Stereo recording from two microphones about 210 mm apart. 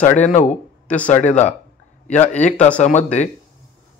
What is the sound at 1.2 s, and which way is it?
A man's voice, 35° left (ahead or behind).